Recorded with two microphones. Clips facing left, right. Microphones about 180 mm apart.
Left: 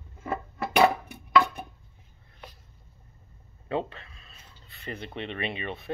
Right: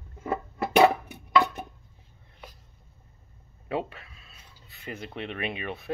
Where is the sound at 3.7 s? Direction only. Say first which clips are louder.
Left 1 dB; 10° right (ahead or behind).